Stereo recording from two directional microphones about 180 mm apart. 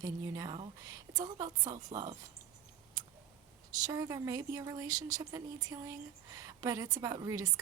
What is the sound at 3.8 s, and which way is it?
Speech, 20° right (ahead or behind).